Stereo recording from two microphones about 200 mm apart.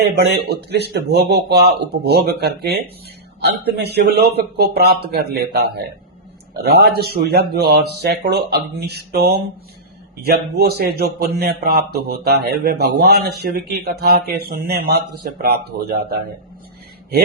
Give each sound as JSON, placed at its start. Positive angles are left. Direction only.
{"t": 0.0, "sound": "a man's voice", "side_deg": -55}